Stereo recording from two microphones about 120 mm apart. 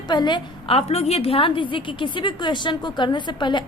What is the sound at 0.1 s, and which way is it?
A woman's voice, 40° left (ahead or behind).